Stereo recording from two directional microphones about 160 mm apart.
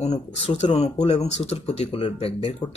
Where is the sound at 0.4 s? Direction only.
40° left (ahead or behind).